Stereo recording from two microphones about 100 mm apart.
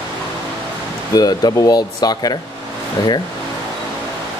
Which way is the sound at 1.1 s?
40° left (ahead or behind).